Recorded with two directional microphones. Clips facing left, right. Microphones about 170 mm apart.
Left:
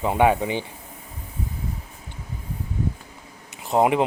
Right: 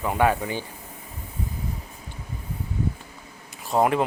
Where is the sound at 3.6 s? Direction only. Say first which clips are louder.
Left 2 dB; 20° left (ahead or behind).